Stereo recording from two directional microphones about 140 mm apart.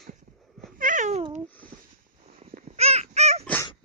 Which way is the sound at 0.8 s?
70° right (ahead or behind).